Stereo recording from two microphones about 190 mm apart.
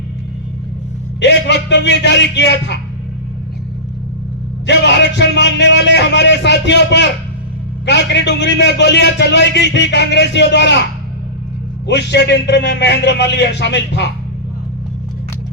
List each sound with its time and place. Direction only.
1.2 s a man's voice: 65° left (ahead or behind)
4.6 s a man's voice: 65° left (ahead or behind)
11.9 s a man's voice: 65° left (ahead or behind)